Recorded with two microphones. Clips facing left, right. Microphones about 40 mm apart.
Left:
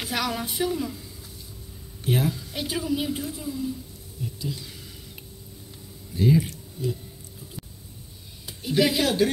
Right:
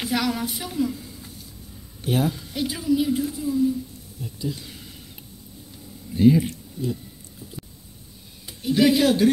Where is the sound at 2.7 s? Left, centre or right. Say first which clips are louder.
Right 4 dB; left.